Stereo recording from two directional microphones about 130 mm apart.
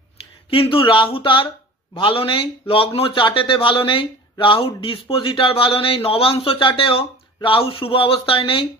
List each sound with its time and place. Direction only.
0.5 s a man's voice: 45° left (ahead or behind)